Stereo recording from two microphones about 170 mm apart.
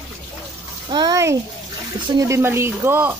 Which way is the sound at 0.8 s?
25° right (ahead or behind).